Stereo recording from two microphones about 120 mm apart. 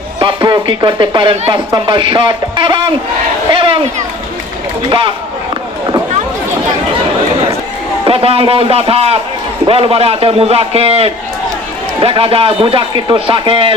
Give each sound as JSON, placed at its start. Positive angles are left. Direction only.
{"t": 0.2, "sound": "a man's voice", "side_deg": -40}
{"t": 4.9, "sound": "a man's voice", "side_deg": -45}
{"t": 8.0, "sound": "a man's voice", "side_deg": -50}